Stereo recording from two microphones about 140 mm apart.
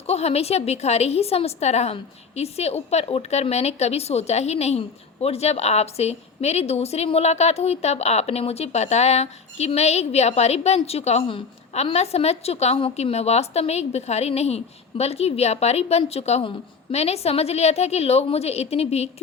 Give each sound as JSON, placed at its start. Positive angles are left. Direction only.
{"t": 0.1, "sound": "a woman's voice", "side_deg": 50}